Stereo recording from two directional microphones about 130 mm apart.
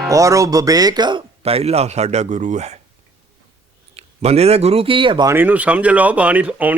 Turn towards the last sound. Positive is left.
turn(degrees=-10)  # may be behind; listen again after turning